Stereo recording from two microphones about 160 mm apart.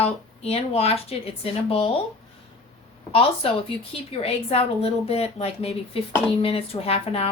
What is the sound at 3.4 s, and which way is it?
A woman's voice, 35° left (ahead or behind).